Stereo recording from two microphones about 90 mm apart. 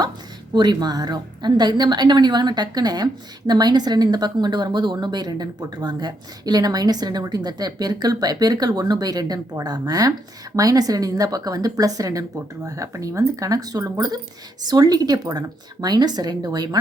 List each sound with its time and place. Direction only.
0.5 s a woman's voice: 50° right (ahead or behind)